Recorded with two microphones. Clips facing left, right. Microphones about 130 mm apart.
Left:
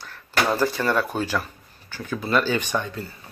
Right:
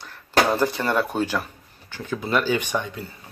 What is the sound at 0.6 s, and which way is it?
Speech, 20° right (ahead or behind).